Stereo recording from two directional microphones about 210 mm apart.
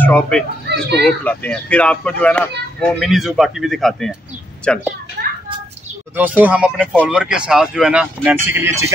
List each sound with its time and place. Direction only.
0.0 s a child's voice: 5° left (ahead or behind)
0.7 s children playing: 55° right (ahead or behind)
1.0 s speech: 5° left (ahead or behind)
5.2 s a sound: 50° right (ahead or behind)
6.1 s speech: 10° right (ahead or behind)